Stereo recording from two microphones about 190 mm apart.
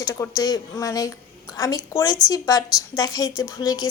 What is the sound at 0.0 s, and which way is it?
A woman's voice, 15° left (ahead or behind).